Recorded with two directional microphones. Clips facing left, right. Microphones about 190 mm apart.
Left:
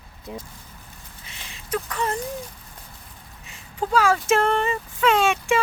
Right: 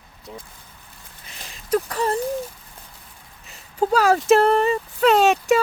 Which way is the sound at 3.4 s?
40° right (ahead or behind).